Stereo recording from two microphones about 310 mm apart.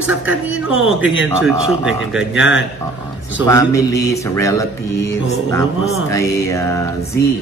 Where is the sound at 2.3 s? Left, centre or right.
Left.